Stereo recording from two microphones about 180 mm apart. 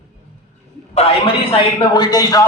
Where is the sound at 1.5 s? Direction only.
25° left (ahead or behind).